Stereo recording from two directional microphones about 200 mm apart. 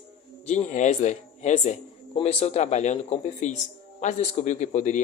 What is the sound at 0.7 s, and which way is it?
Speech, 35° left (ahead or behind).